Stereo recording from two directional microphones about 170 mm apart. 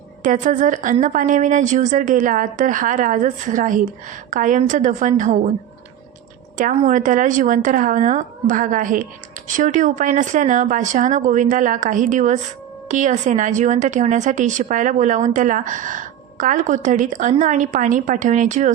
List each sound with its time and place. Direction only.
0.2 s a woman's voice: 50° right (ahead or behind)
6.6 s a woman's voice: 50° right (ahead or behind)